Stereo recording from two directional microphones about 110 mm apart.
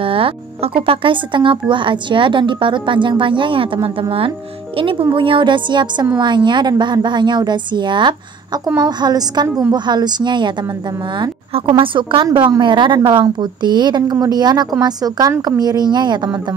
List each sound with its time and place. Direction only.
0.0 s a woman's voice: 55° right (ahead or behind)
11.7 s a woman's voice: 50° right (ahead or behind)